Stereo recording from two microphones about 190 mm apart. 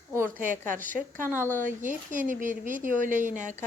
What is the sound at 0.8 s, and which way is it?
Speech, 45° right (ahead or behind).